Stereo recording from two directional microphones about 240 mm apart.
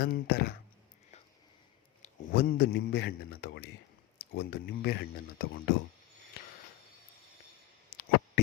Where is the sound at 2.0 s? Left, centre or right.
Left.